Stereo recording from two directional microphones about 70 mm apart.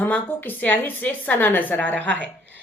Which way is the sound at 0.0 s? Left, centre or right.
Left.